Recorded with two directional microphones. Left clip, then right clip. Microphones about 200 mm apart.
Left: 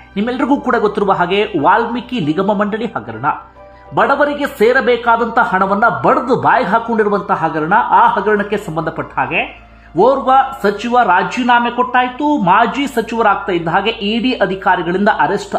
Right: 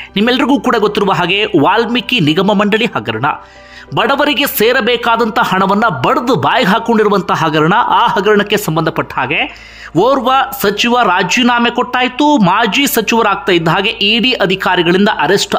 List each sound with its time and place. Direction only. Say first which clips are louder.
0.1 s a man's voice: right 4 dB; 20° right (ahead or behind)